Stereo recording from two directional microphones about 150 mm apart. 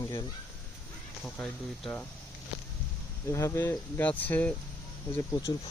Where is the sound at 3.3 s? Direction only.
20° left (ahead or behind).